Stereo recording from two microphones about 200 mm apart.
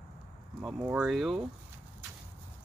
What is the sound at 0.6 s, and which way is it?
Speech, 5° right (ahead or behind).